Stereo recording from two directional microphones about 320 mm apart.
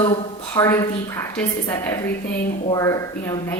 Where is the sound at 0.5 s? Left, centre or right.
Centre.